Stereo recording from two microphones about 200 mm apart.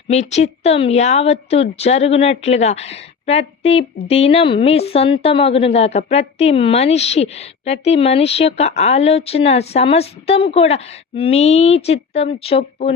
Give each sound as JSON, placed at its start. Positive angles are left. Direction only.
{"t": 0.1, "sound": "a woman's voice", "side_deg": 35}